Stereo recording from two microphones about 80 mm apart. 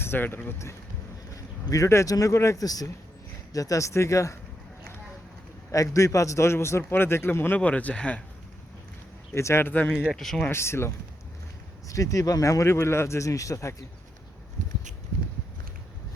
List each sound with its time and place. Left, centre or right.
0.0 s speech: left
1.3 s a sound: left
2.1 s a man's voice: left
5.7 s a man's voice: left; by 8.2 s centre
9.3 s a man's voice: left
9.9 s speech: centre
10.5 s a man's voice: left
11.9 s speech: left